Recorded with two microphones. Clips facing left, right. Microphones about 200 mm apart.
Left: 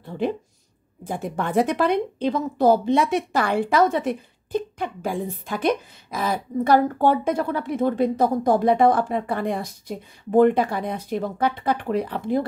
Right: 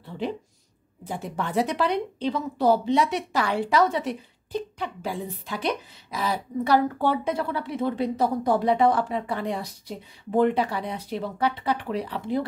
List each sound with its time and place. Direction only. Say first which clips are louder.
0.0 s a woman's voice: left 5 dB; 50° left (ahead or behind)